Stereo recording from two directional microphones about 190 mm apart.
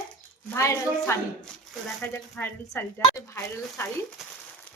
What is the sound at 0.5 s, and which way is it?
Speech, 15° left (ahead or behind).